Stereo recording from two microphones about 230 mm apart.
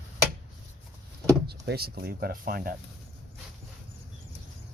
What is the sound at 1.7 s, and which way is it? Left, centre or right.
Speech, right.